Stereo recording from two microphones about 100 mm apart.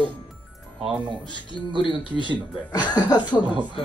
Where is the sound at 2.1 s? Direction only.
50° right (ahead or behind).